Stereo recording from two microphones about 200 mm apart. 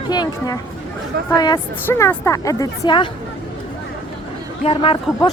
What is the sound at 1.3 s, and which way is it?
Speech, 20° left (ahead or behind).